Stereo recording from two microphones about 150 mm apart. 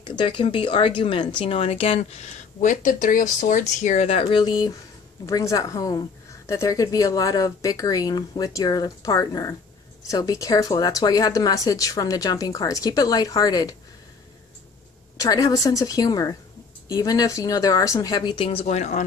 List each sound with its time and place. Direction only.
0.0 s speech: 30° left (ahead or behind)
15.1 s speech: 25° left (ahead or behind); by 19.0 s 50° left (ahead or behind)